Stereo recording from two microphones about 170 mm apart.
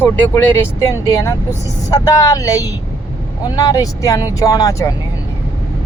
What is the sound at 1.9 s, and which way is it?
Speech, 20° left (ahead or behind).